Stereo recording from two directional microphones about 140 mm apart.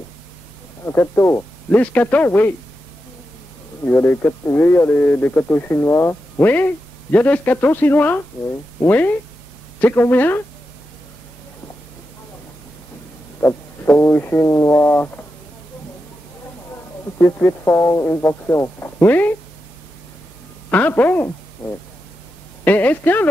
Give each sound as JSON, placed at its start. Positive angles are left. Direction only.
{"t": 0.8, "sound": "speech", "side_deg": 20}
{"t": 3.8, "sound": "speech", "side_deg": 15}
{"t": 13.4, "sound": "speech", "side_deg": 15}
{"t": 17.2, "sound": "speech", "side_deg": 15}
{"t": 20.7, "sound": "speech", "side_deg": 15}
{"t": 22.7, "sound": "speech", "side_deg": 10}